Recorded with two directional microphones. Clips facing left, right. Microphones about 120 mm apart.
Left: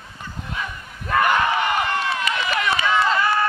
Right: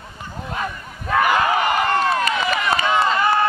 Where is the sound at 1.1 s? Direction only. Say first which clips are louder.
Right 1 dB; 5° right (ahead or behind).